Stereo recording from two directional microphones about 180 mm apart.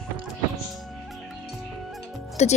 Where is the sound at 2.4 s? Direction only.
35° left (ahead or behind).